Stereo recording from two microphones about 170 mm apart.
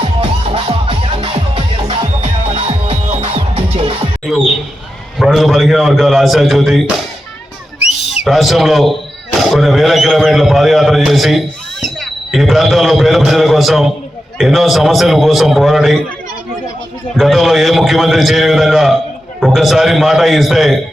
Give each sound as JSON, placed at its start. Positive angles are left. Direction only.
{"t": 0.0, "sound": "music", "side_deg": -30}
{"t": 5.2, "sound": "a man's voice", "side_deg": 0}
{"t": 8.2, "sound": "a man's voice", "side_deg": 0}
{"t": 17.2, "sound": "a man's voice", "side_deg": 0}